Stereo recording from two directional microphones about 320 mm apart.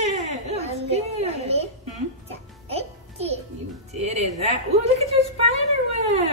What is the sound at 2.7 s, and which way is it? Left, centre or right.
Music, centre.